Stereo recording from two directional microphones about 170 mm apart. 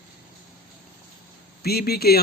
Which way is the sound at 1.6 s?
65° left (ahead or behind).